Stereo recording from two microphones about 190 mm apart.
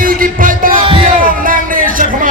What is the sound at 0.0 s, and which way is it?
Music, 45° right (ahead or behind).